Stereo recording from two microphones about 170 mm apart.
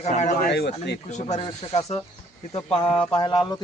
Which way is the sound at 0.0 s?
45° left (ahead or behind).